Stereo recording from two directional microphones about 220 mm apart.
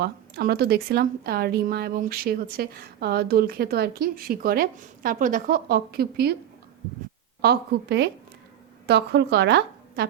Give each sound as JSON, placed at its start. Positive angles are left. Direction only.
{"t": 0.0, "sound": "speech", "side_deg": -45}
{"t": 7.4, "sound": "speech", "side_deg": -50}